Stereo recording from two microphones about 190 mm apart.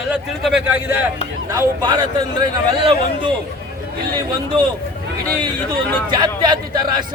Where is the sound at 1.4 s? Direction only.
20° right (ahead or behind).